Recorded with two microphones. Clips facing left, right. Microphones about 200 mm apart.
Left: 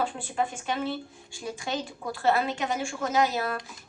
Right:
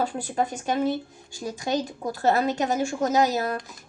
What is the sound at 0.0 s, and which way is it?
A child's voice, 40° right (ahead or behind).